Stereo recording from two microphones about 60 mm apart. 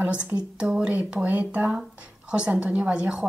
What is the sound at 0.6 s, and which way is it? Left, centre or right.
Speech, centre.